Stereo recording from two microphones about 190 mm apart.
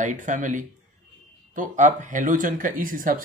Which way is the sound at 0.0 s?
40° right (ahead or behind).